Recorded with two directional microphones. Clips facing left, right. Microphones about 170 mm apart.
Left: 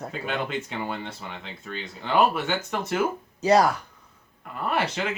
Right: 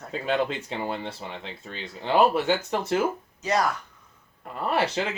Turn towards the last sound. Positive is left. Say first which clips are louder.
# right 1 dB
turn(degrees=-30)  # may be behind; listen again after turning